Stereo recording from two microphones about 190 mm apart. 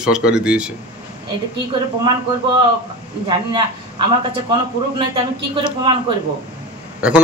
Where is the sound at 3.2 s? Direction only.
25° right (ahead or behind).